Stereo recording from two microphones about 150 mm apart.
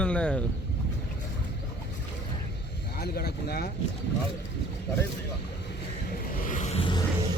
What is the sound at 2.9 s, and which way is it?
Speech, 90° left.